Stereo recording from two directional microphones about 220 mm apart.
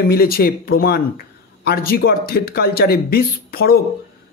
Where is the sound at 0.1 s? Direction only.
45° left (ahead or behind).